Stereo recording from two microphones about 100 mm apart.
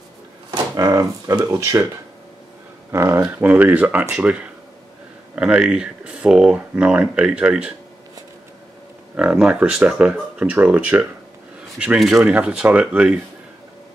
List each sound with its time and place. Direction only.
0.5 s speech: 40° right (ahead or behind)
2.9 s speech: 25° right (ahead or behind)
9.1 s speech: 10° right (ahead or behind)